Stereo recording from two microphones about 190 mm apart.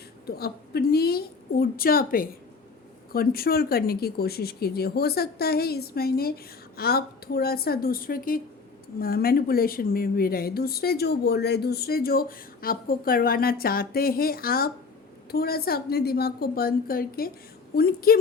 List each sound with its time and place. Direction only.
0.3 s a woman's voice: 55° left (ahead or behind)